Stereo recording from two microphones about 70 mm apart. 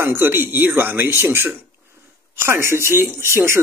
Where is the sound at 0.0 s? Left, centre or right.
Right.